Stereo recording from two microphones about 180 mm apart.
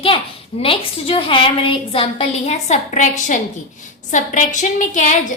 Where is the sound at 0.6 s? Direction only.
30° left (ahead or behind).